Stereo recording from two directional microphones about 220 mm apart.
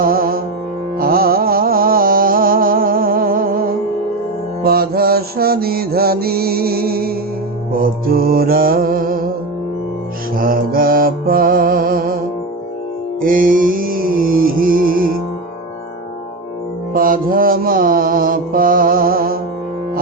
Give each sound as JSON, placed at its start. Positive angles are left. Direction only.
{"t": 0.0, "sound": "music", "side_deg": -40}
{"t": 0.9, "sound": "carnatic music", "side_deg": -40}
{"t": 4.6, "sound": "mantra", "side_deg": -45}
{"t": 7.7, "sound": "music", "side_deg": -40}
{"t": 10.3, "sound": "mantra", "side_deg": -40}
{"t": 13.2, "sound": "music", "side_deg": -40}
{"t": 16.9, "sound": "mantra", "side_deg": -40}